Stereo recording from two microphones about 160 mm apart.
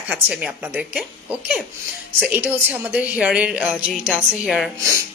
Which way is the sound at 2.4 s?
10° right (ahead or behind).